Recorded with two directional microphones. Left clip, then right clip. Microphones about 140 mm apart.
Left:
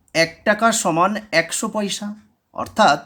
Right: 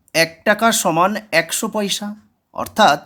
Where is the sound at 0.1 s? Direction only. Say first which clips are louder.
Right 2 dB; 30° right (ahead or behind).